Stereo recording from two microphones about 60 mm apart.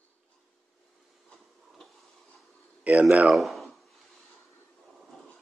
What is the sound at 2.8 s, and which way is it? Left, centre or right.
Speech, right.